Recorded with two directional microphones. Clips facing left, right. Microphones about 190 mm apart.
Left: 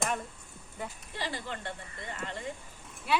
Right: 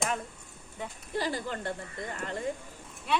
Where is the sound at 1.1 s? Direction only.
45° right (ahead or behind).